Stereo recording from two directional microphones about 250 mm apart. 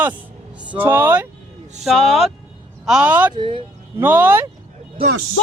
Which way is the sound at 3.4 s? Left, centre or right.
Centre.